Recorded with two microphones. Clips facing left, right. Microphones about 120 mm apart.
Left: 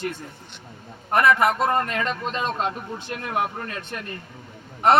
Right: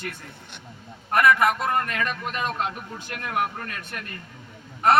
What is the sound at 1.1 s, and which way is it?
A man's voice, 25° left (ahead or behind).